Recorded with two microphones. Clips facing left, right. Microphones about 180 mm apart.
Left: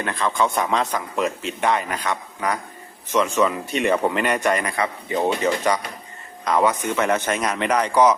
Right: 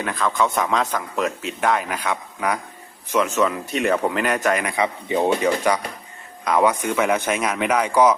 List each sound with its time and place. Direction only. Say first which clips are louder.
0.0 s speech: even; centre (ahead or behind)
4.7 s speech: right 2 dB; 15° right (ahead or behind)